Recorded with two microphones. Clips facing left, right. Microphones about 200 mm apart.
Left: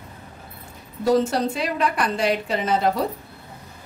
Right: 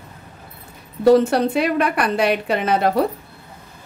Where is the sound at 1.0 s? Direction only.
60° right (ahead or behind).